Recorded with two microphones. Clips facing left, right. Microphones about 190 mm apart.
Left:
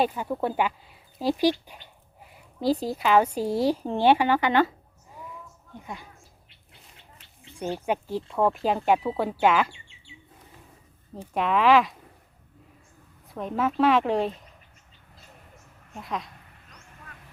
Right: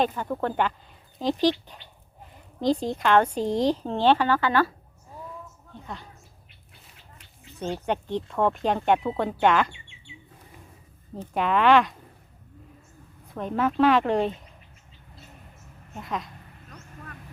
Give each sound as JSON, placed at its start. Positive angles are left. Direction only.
{"t": 0.0, "sound": "speech", "side_deg": 10}
{"t": 5.7, "sound": "speech", "side_deg": 10}
{"t": 7.9, "sound": "speech", "side_deg": 5}
{"t": 11.3, "sound": "speech", "side_deg": 0}
{"t": 13.2, "sound": "speech", "side_deg": 0}
{"t": 16.0, "sound": "speech", "side_deg": 0}
{"t": 16.6, "sound": "vehicle", "side_deg": -50}